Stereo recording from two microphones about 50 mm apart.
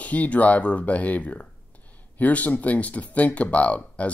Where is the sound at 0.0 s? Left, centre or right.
Left.